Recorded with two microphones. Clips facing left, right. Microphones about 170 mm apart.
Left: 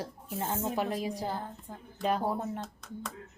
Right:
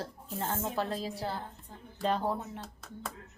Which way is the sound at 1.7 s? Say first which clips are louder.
Left 5 dB; 45° left (ahead or behind).